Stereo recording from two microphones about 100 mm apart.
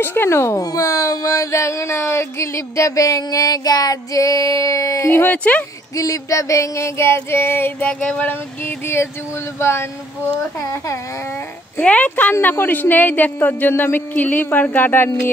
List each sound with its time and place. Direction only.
0.0 s speech: 20° left (ahead or behind)
5.9 s a woman's voice: 35° left (ahead or behind)
11.8 s a woman's voice: 15° left (ahead or behind)